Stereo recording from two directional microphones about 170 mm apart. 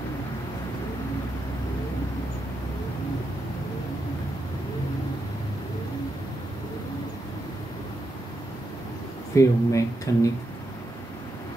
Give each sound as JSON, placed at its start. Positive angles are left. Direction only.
{"t": 9.3, "sound": "speech", "side_deg": 20}